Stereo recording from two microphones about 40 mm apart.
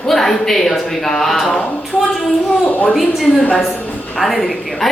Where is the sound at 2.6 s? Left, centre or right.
Left.